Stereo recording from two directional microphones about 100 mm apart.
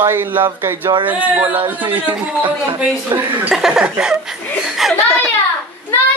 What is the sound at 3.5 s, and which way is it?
Chuckle, 5° right (ahead or behind).